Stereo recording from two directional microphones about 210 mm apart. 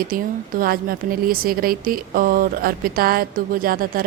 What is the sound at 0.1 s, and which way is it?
A woman's voice, 45° right (ahead or behind).